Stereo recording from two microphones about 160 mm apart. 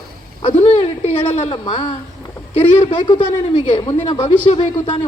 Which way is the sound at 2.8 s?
30° left (ahead or behind).